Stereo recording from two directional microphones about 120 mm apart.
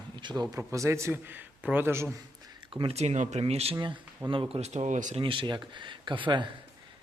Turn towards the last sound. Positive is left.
turn(degrees=-40)  # may be behind; listen again after turning